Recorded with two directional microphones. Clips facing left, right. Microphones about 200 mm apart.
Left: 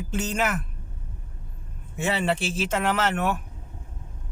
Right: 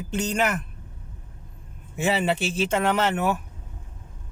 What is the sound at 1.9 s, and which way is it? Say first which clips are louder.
Speech: right 2 dB; centre (ahead or behind).